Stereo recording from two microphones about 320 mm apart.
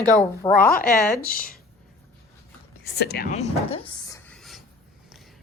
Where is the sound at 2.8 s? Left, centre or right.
Left; by 4.6 s centre.